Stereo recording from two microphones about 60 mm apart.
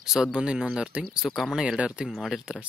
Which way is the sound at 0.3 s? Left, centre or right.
Centre.